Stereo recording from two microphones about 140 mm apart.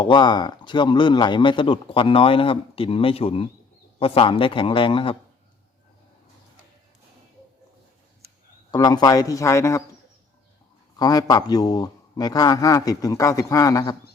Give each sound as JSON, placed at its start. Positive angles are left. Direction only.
{"t": 0.0, "sound": "a man's voice", "side_deg": 35}
{"t": 8.7, "sound": "a man's voice", "side_deg": 25}
{"t": 10.9, "sound": "a man's voice", "side_deg": 25}